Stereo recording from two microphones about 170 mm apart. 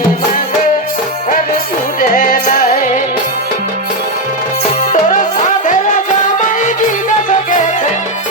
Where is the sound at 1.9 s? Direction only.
55° left (ahead or behind).